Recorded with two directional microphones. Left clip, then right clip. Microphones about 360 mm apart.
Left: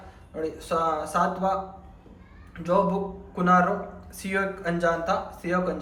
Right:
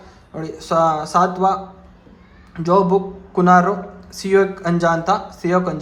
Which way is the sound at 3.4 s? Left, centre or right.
Centre.